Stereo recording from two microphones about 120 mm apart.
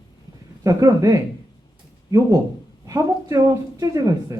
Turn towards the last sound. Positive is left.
turn(degrees=-30)  # may be behind; listen again after turning